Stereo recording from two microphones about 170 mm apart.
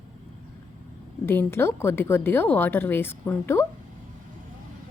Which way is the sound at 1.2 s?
15° left (ahead or behind).